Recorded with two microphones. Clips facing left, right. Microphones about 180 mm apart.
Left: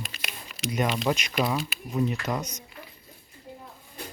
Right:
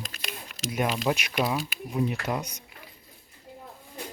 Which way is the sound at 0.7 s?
5° right (ahead or behind).